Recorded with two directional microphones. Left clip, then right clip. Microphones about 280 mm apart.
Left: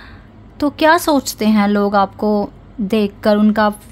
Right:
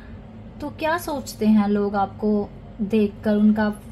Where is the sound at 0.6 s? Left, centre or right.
Left.